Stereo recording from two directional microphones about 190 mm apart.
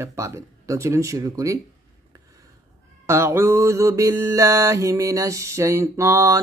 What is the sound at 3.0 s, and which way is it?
Mantra, 15° right (ahead or behind).